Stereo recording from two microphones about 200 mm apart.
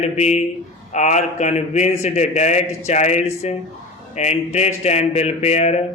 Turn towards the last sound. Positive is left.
turn(degrees=35)  # may be behind; listen again after turning